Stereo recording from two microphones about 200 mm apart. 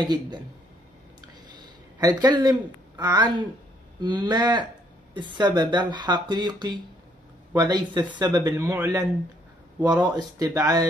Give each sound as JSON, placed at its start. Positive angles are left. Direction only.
{"t": 0.0, "sound": "speech", "side_deg": -20}
{"t": 1.5, "sound": "speech", "side_deg": -20}
{"t": 10.1, "sound": "speech", "side_deg": -20}